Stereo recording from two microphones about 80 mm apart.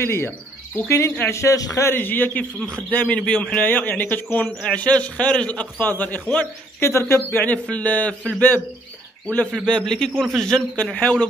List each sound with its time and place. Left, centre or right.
0.0 s a man's voice: left
1.3 s speech: left
1.9 s a man's voice: left
3.2 s a man's voice: centre
6.8 s speech: left
7.2 s a man's voice: left
9.7 s a man's voice: centre